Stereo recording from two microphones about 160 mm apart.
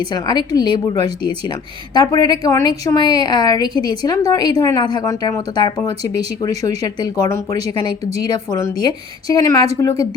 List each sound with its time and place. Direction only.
0.0 s a woman's voice: 25° left (ahead or behind)
1.9 s a woman's voice: 25° left (ahead or behind)